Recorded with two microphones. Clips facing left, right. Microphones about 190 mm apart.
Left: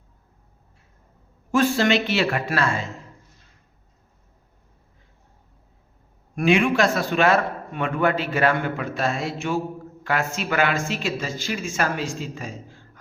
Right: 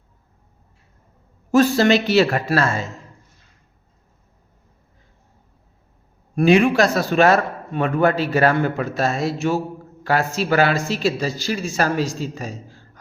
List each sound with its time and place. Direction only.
1.5 s speech: 40° right (ahead or behind)
6.3 s a man's voice: 40° right (ahead or behind)